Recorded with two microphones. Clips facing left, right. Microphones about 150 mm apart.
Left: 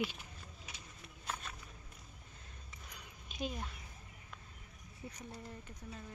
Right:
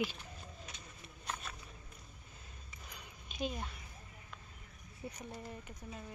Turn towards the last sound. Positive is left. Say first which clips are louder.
# right 3 dB
turn(degrees=-20)  # may be behind; listen again after turning